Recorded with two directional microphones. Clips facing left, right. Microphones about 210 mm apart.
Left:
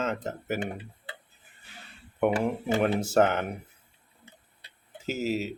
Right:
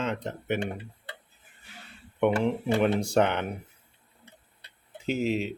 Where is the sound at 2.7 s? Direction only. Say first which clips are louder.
Even; centre (ahead or behind).